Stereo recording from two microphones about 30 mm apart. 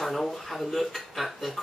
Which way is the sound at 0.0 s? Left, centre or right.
Centre.